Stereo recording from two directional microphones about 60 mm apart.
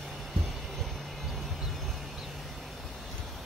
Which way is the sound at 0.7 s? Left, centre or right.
Centre.